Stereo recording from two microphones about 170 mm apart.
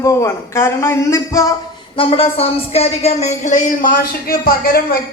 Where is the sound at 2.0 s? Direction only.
35° left (ahead or behind).